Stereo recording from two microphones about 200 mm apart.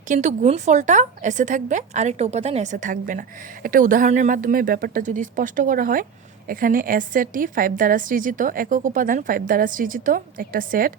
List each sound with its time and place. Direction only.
0.1 s a woman's voice: 35° right (ahead or behind)